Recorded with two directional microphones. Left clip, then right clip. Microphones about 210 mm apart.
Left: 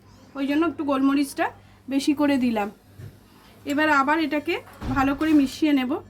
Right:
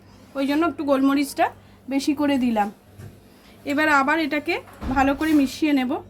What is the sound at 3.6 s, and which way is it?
A woman's voice, 15° right (ahead or behind).